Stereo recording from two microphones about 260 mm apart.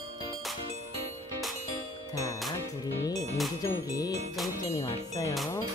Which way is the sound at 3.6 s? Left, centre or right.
Centre.